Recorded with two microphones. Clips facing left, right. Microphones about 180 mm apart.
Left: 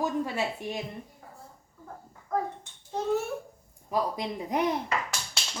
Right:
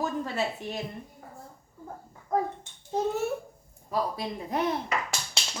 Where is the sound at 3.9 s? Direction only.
15° left (ahead or behind).